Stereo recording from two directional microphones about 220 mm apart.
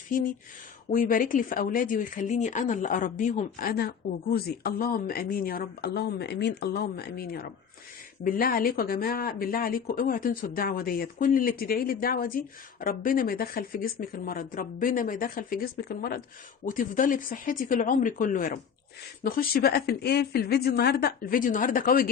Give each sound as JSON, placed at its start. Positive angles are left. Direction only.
{"t": 0.1, "sound": "a woman's voice", "side_deg": 40}